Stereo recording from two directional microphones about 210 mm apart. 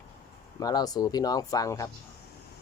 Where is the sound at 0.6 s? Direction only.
20° left (ahead or behind).